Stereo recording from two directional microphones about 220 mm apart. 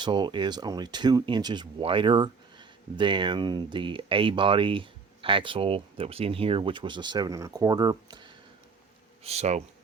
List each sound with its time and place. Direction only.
0.0 s speech: 20° right (ahead or behind)
9.2 s speech: 30° right (ahead or behind)